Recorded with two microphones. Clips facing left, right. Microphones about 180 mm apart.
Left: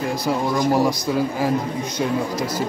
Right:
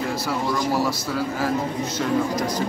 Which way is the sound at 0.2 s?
20° left (ahead or behind).